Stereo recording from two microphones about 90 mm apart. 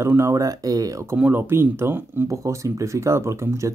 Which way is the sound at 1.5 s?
25° right (ahead or behind).